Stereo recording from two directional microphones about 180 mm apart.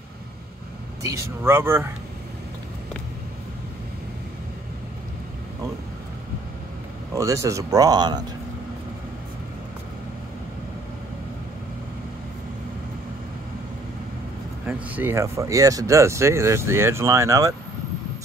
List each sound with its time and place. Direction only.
1.1 s speech: 15° right (ahead or behind)
7.2 s speech: 15° right (ahead or behind)
14.7 s speech: 10° right (ahead or behind)